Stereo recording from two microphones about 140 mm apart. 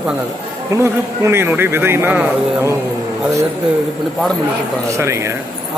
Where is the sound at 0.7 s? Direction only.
20° right (ahead or behind).